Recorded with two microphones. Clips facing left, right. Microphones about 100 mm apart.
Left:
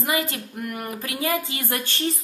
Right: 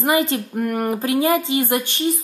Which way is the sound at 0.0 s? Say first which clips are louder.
Right 7 dB; 25° right (ahead or behind).